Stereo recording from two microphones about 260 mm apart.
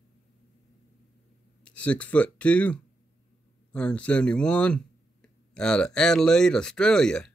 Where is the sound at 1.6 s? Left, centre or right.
Centre.